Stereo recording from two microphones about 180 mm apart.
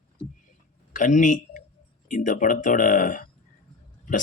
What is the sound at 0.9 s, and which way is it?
Speech, 45° left (ahead or behind).